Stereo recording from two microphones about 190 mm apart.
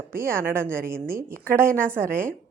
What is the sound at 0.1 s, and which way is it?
A woman's voice, 15° right (ahead or behind).